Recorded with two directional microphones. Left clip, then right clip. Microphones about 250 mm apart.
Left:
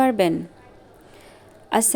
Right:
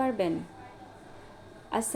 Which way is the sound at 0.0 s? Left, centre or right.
Left.